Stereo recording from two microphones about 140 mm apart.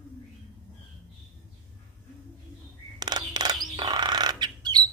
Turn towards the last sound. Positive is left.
turn(degrees=-30)  # may be behind; listen again after turning